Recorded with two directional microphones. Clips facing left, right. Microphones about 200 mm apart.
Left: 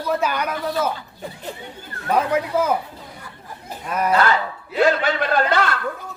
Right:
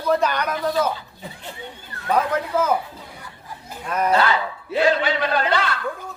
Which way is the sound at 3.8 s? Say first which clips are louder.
Even; 10° left (ahead or behind).